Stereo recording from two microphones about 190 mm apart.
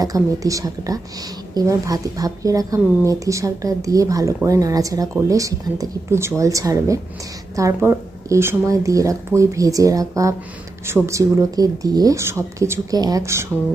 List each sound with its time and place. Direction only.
0.0 s a woman's voice: 20° right (ahead or behind)